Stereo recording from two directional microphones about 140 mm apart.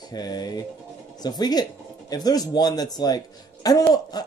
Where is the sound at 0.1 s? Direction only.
30° left (ahead or behind).